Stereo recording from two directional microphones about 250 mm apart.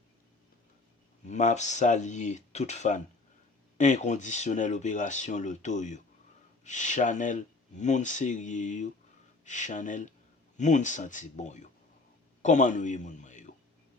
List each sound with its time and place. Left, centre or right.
1.2 s a man's voice: left